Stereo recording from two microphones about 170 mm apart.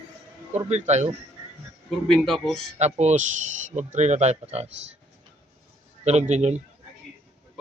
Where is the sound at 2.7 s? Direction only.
40° right (ahead or behind).